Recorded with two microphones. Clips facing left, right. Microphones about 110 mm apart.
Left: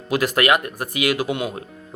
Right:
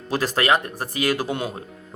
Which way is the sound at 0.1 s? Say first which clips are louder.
Left 2 dB; 35° right (ahead or behind).